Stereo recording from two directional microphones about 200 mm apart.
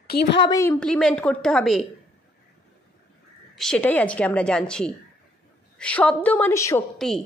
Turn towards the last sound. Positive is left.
turn(degrees=5)  # may be behind; listen again after turning